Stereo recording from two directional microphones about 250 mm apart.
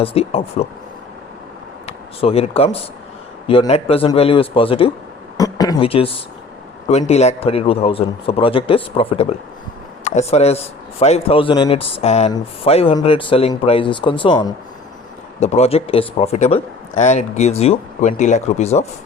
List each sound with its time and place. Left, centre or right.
0.0 s speech: left
1.9 s speech: left